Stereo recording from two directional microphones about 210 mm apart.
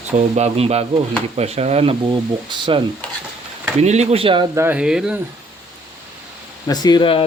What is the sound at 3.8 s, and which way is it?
Speech, 30° right (ahead or behind).